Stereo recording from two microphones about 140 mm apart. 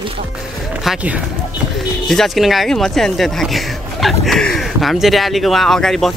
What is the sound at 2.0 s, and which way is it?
Speech, centre (ahead or behind).